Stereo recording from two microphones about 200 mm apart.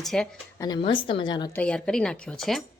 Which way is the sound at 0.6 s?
20° left (ahead or behind).